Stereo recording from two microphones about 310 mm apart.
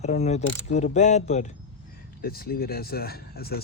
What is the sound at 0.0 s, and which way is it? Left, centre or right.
Speech, left.